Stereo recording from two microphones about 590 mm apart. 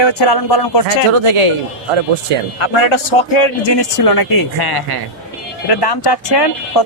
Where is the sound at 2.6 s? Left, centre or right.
Left.